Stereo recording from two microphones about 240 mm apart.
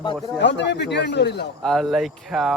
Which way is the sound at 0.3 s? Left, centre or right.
Left.